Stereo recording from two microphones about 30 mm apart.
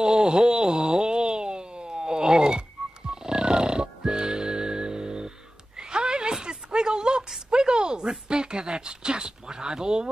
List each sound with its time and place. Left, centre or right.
0.0 s wail: right
3.1 s music: right
5.8 s a sound: right